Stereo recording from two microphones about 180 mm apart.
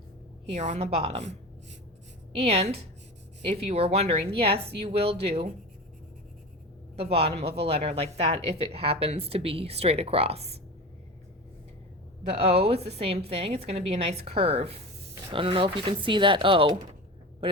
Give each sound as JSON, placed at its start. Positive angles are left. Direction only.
{"t": 0.4, "sound": "speech", "side_deg": -40}
{"t": 2.4, "sound": "speech", "side_deg": -35}
{"t": 6.9, "sound": "speech", "side_deg": -35}
{"t": 12.4, "sound": "speech", "side_deg": -35}